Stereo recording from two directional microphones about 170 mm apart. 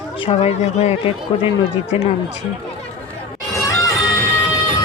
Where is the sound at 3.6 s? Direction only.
15° left (ahead or behind).